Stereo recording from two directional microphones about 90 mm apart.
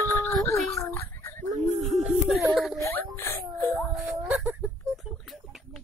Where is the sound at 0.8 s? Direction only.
30° left (ahead or behind).